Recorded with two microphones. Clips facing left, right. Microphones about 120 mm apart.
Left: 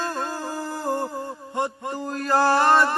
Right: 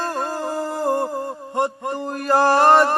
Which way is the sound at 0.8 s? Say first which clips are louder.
Right 5 dB; 30° right (ahead or behind).